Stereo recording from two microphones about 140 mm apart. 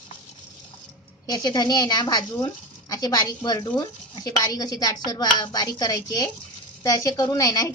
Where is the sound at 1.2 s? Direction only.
30° left (ahead or behind).